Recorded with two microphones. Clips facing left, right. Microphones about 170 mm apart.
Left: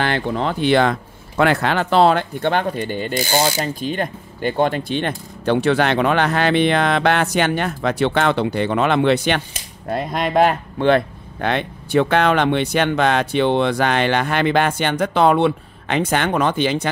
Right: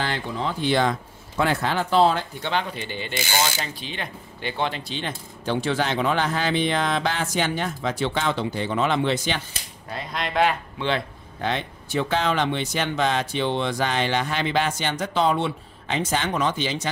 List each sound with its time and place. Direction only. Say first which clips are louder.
0.0 s speech: left 7 dB; 65° left (ahead or behind)
9.8 s speech: left 9 dB; 50° left (ahead or behind)